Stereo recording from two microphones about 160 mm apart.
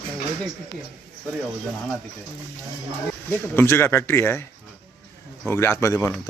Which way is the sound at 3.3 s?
15° left (ahead or behind).